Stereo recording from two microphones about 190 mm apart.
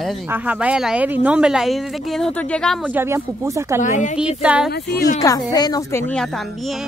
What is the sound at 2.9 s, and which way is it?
Speech, 10° right (ahead or behind).